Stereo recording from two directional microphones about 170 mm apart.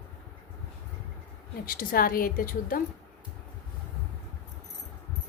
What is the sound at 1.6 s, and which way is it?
A woman's voice, 60° left (ahead or behind).